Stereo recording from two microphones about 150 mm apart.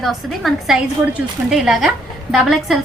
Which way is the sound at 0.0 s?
Centre (ahead or behind).